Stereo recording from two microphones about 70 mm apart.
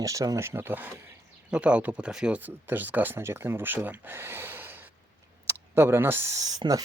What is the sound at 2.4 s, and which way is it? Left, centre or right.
Speech, right.